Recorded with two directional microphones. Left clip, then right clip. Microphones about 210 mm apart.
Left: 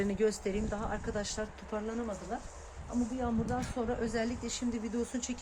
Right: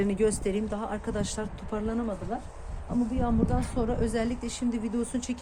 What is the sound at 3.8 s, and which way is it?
A woman's voice, 20° right (ahead or behind).